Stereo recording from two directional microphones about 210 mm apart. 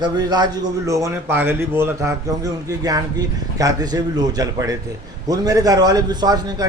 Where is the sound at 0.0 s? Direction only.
20° right (ahead or behind).